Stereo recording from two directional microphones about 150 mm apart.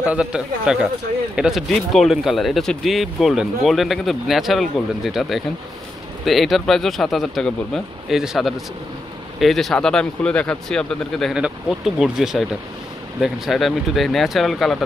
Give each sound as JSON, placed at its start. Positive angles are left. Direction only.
{"t": 0.0, "sound": "speech", "side_deg": -10}